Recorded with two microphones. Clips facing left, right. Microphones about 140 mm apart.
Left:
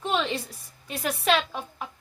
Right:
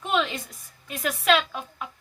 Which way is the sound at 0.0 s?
30° left (ahead or behind).